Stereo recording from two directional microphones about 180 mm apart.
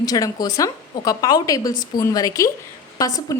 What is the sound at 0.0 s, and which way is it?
A woman's voice, 20° left (ahead or behind).